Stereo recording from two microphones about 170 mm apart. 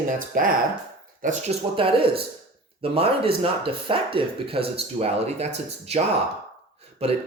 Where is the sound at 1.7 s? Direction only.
30° right (ahead or behind).